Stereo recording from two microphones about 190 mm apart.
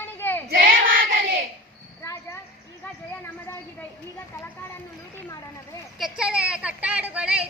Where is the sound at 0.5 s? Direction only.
45° right (ahead or behind).